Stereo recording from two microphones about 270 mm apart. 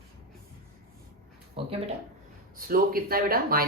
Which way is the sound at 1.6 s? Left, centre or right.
Centre.